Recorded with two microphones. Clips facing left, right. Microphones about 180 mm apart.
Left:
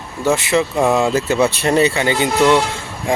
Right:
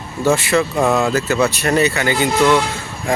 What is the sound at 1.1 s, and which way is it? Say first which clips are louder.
Speech: left 1 dB; 30° left (ahead or behind).